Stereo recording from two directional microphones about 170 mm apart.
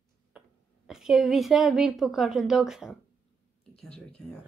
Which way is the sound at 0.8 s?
Centre (ahead or behind).